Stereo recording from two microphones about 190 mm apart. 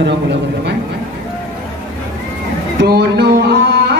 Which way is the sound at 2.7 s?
60° right (ahead or behind).